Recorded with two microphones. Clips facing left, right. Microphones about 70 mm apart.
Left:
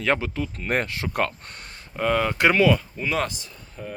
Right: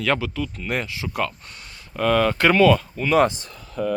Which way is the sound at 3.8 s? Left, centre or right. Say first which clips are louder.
Right 12 dB; right.